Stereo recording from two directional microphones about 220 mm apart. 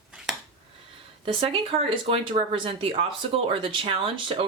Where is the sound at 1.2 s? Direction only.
25° right (ahead or behind).